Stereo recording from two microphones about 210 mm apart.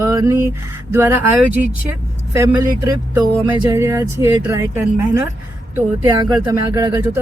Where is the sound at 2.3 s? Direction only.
15° right (ahead or behind).